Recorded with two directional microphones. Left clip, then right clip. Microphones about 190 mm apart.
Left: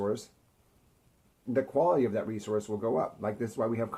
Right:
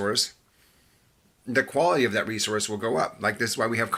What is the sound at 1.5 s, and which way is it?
Speech, 25° right (ahead or behind).